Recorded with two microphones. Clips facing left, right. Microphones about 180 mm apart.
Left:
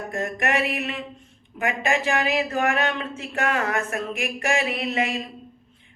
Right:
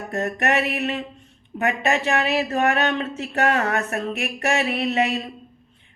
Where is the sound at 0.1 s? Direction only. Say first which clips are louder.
Right 3 dB; 40° right (ahead or behind).